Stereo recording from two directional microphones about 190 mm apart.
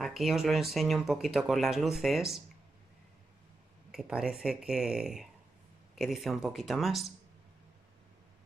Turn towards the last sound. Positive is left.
turn(degrees=0)  # may be behind; listen again after turning